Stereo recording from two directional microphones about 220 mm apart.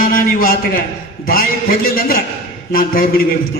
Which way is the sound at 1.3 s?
40° left (ahead or behind).